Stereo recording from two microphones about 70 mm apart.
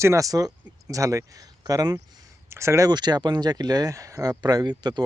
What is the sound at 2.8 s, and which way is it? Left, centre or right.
Speech, right.